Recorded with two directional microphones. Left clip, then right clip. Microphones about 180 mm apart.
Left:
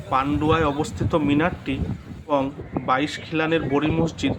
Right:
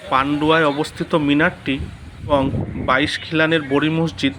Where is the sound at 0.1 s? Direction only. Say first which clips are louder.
Right 5 dB; 15° right (ahead or behind).